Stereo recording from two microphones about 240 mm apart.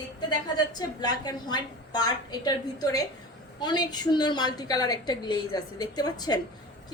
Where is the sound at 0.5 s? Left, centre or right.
Centre.